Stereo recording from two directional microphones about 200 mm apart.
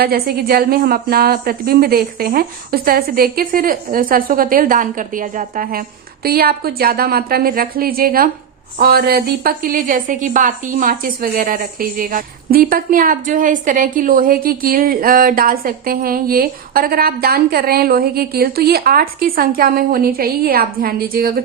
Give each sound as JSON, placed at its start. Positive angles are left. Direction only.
{"t": 0.0, "sound": "a woman's voice", "side_deg": -50}